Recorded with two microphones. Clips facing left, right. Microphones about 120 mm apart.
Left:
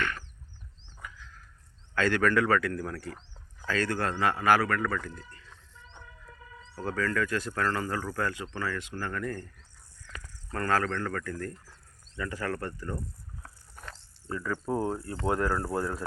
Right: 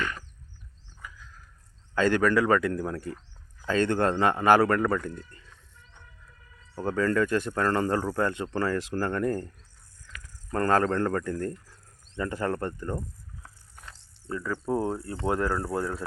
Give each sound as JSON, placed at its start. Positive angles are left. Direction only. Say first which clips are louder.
{"t": 2.0, "sound": "speech", "louder": "right 3 dB", "side_deg": -15}
{"t": 3.0, "sound": "speech", "louder": "right 4 dB", "side_deg": 25}
{"t": 3.7, "sound": "speech", "louder": "right 5 dB", "side_deg": -25}
{"t": 6.7, "sound": "speech", "louder": "right 5 dB", "side_deg": -20}
{"t": 10.5, "sound": "speech", "louder": "right 5 dB", "side_deg": -30}
{"t": 10.9, "sound": "speech", "louder": "right 6 dB", "side_deg": -40}
{"t": 14.3, "sound": "speech", "louder": "right 1 dB", "side_deg": -5}
{"t": 14.7, "sound": "speech", "louder": "right 3 dB", "side_deg": -30}
{"t": 15.5, "sound": "speech", "louder": "right 1 dB", "side_deg": 0}